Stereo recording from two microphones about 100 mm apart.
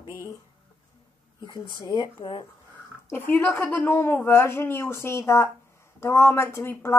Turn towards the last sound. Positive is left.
turn(degrees=25)  # may be behind; listen again after turning